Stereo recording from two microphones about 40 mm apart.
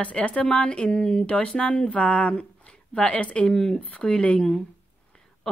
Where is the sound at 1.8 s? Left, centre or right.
Left.